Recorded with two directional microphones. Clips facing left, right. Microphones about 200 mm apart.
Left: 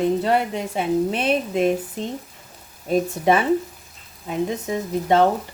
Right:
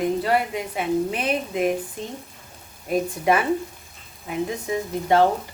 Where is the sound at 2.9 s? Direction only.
25° left (ahead or behind).